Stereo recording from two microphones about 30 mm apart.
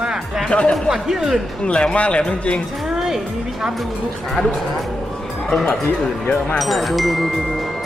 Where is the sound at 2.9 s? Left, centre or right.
Centre.